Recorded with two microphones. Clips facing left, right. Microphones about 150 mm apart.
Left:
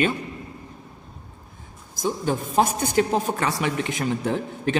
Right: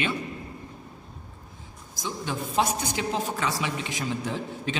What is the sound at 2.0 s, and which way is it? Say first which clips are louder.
A woman's voice: left 7 dB; 45° left (ahead or behind).